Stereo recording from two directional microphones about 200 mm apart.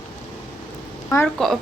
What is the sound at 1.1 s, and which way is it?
Speech, 10° left (ahead or behind).